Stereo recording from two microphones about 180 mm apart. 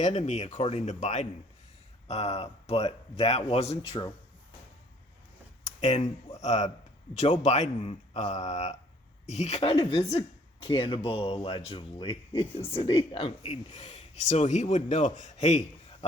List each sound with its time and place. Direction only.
0.0 s speech: 40° left (ahead or behind)
5.8 s speech: 40° left (ahead or behind); by 12.5 s 25° left (ahead or behind)
12.5 s speech: 10° left (ahead or behind)
12.7 s speech: 30° left (ahead or behind)